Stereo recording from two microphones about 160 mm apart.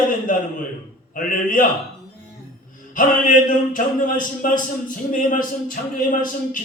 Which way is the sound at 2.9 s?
55° left (ahead or behind).